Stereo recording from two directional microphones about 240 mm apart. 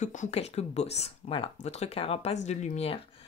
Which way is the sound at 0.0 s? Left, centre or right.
Left.